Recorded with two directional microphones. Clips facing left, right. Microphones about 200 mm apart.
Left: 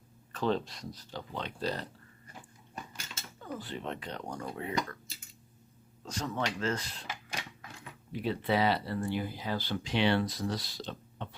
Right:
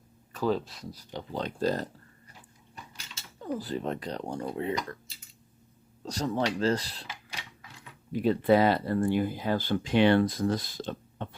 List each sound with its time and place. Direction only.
0.3 s speech: 5° right (ahead or behind)
1.3 s speech: 40° right (ahead or behind)
2.7 s mechanisms: 50° left (ahead or behind)
3.4 s speech: 40° right (ahead or behind)
6.1 s speech: 35° right (ahead or behind)
8.1 s speech: 45° right (ahead or behind)